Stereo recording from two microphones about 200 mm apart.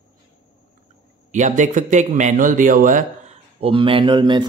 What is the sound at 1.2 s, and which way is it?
A man's voice, 40° right (ahead or behind).